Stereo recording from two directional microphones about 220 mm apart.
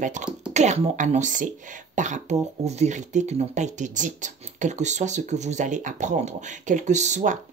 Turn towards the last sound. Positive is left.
turn(degrees=-35)  # may be behind; listen again after turning